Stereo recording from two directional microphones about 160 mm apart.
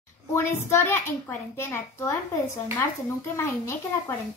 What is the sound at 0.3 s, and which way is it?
A woman's voice, 15° left (ahead or behind).